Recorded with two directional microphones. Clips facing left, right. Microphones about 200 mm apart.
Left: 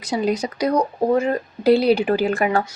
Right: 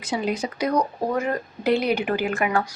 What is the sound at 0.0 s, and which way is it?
Speech, 40° left (ahead or behind).